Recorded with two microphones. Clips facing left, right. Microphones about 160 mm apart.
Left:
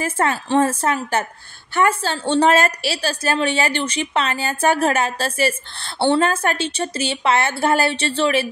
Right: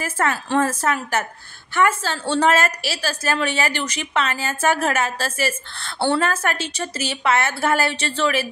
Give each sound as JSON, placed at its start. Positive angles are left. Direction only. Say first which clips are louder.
{"t": 0.0, "sound": "a woman's voice", "louder": "left 2 dB", "side_deg": 30}